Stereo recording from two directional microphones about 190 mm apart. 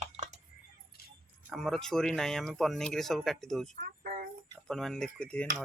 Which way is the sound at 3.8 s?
45° right (ahead or behind).